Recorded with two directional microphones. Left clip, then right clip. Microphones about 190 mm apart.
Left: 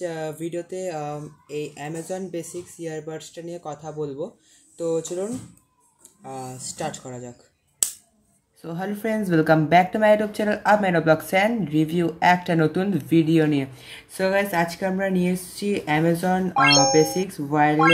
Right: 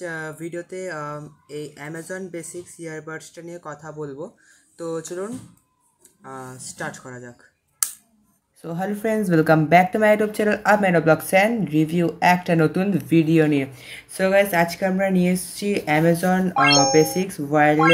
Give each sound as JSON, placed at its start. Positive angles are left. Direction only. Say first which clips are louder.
{"t": 0.4, "sound": "speech", "louder": "left 1 dB", "side_deg": -10}
{"t": 4.7, "sound": "speech", "louder": "left 3 dB", "side_deg": -10}
{"t": 8.5, "sound": "speech", "louder": "right 3 dB", "side_deg": 0}